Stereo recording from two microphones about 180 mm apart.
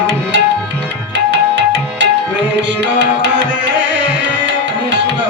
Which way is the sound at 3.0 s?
80° right.